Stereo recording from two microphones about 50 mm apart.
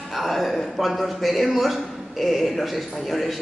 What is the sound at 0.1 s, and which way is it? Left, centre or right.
A man's voice, centre.